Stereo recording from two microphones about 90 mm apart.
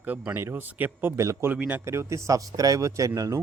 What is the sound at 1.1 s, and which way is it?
Speech, 35° right (ahead or behind).